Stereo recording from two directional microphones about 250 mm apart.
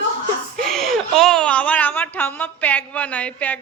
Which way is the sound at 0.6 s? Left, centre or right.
Centre.